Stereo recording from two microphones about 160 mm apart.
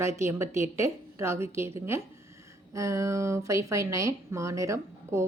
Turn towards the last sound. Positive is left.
turn(degrees=-20)  # may be behind; listen again after turning